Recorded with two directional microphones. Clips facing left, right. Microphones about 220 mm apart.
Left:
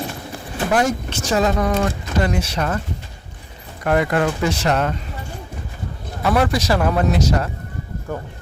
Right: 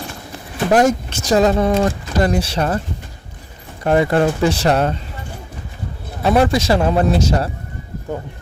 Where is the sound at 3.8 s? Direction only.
25° right (ahead or behind).